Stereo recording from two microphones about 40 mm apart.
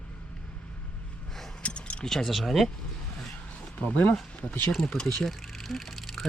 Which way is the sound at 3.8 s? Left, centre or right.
Left.